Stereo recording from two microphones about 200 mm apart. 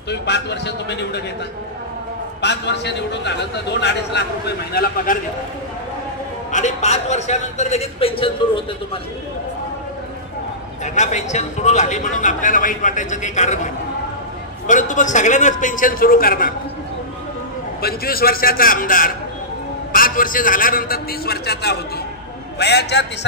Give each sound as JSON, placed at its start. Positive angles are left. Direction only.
{"t": 0.1, "sound": "a man's voice", "side_deg": 60}
{"t": 2.4, "sound": "a man's voice", "side_deg": 60}
{"t": 4.7, "sound": "a man's voice", "side_deg": 40}
{"t": 6.5, "sound": "a man's voice", "side_deg": 35}
{"t": 11.0, "sound": "a man's voice", "side_deg": 35}
{"t": 14.7, "sound": "a man's voice", "side_deg": 40}
{"t": 17.8, "sound": "a man's voice", "side_deg": 50}